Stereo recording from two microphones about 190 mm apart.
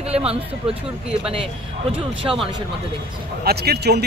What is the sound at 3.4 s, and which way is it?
Speech, 55° right (ahead or behind).